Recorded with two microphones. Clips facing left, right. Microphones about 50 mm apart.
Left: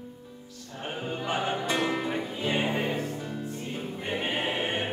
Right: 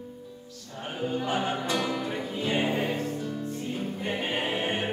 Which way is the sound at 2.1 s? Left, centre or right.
Centre.